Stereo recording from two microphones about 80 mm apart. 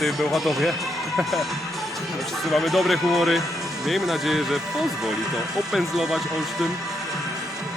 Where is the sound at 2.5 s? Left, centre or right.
Centre.